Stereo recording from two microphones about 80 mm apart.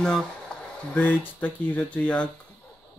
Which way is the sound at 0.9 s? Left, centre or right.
Left.